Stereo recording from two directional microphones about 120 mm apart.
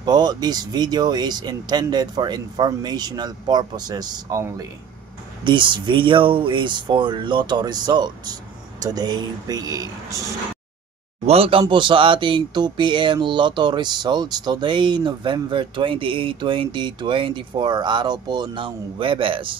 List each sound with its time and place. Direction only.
0.0 s speech: 35° right (ahead or behind)
5.4 s speech: 40° right (ahead or behind)
11.2 s speech: 55° right (ahead or behind)
11.7 s a sound: 45° right (ahead or behind)